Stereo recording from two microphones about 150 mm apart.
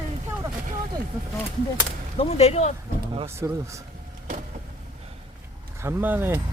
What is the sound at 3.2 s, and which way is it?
Speech, 20° right (ahead or behind).